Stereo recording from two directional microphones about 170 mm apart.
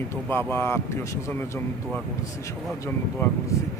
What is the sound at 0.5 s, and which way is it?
Speech, 15° left (ahead or behind).